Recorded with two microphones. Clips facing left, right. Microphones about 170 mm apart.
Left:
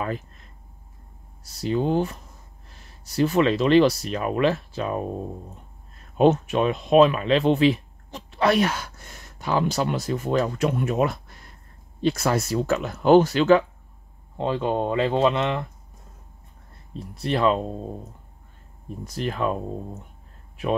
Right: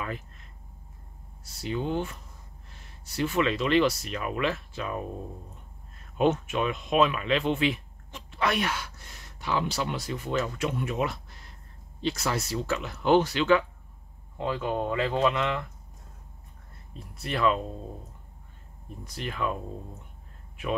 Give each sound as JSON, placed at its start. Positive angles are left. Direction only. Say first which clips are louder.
{"t": 1.4, "sound": "speech", "louder": "left 7 dB", "side_deg": 40}
{"t": 14.4, "sound": "speech", "louder": "left 5 dB", "side_deg": 30}
{"t": 16.9, "sound": "speech", "louder": "left 7 dB", "side_deg": 30}
{"t": 19.0, "sound": "speech", "louder": "left 6 dB", "side_deg": 40}